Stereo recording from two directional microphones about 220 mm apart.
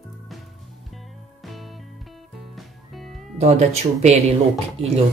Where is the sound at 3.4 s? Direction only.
30° right (ahead or behind).